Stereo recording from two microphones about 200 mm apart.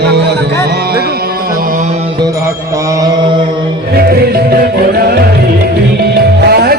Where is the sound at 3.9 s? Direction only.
50° right (ahead or behind).